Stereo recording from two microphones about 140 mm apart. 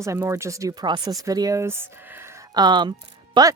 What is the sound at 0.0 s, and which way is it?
Speech, 20° right (ahead or behind).